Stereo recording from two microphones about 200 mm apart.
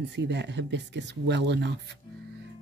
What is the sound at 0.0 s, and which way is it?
Speech, 60° right (ahead or behind).